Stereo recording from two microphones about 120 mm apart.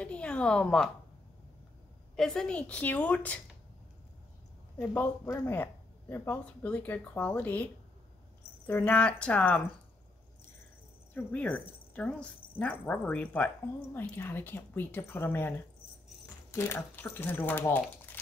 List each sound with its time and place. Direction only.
0.0 s a woman's voice: 10° left (ahead or behind)
2.1 s speech: 5° left (ahead or behind)
4.9 s speech: 20° left (ahead or behind)
8.6 s speech: 15° left (ahead or behind)
11.1 s speech: 10° left (ahead or behind)
16.5 s speech: 20° left (ahead or behind)